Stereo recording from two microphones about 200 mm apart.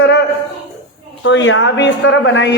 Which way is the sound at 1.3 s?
70° left (ahead or behind).